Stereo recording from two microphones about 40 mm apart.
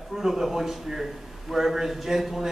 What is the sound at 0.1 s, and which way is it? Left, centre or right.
A man's voice, centre.